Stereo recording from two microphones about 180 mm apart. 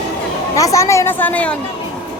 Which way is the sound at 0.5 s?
15° left (ahead or behind).